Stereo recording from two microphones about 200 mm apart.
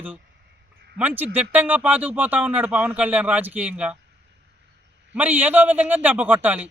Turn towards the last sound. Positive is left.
turn(degrees=-10)  # may be behind; listen again after turning